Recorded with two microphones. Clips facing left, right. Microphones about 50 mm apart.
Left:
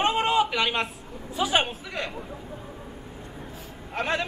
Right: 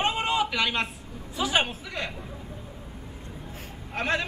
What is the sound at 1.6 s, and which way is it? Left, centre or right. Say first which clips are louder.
Speech: even; centre.